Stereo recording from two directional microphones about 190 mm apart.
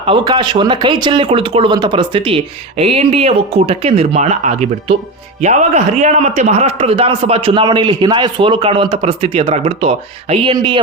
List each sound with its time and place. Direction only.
0.0 s a man's voice: 25° right (ahead or behind)